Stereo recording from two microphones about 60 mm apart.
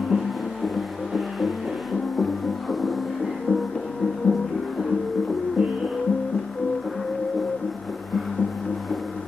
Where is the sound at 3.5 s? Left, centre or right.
Centre.